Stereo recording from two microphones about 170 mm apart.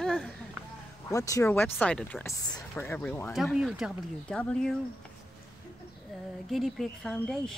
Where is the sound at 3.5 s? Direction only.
5° right (ahead or behind).